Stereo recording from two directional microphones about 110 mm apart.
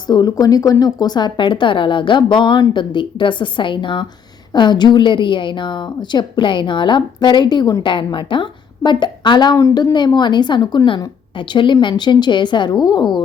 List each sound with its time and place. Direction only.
0.1 s a woman's voice: 35° left (ahead or behind)
9.6 s a woman's voice: 30° left (ahead or behind)